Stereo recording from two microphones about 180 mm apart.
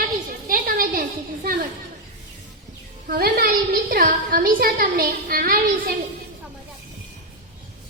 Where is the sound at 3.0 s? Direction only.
55° right (ahead or behind).